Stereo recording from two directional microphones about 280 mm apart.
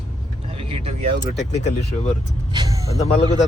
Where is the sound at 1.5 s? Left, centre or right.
Left.